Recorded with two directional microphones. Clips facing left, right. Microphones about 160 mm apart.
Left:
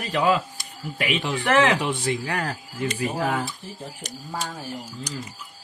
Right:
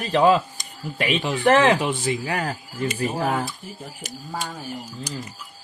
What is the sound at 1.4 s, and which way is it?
Speech, 30° right (ahead or behind).